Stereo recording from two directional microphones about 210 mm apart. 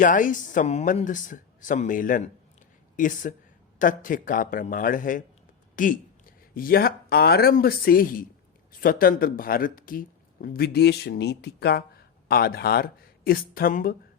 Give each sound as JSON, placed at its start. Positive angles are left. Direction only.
{"t": 0.0, "sound": "speech", "side_deg": 40}